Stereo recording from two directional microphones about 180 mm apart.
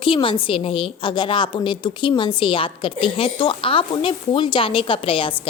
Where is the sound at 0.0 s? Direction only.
30° left (ahead or behind).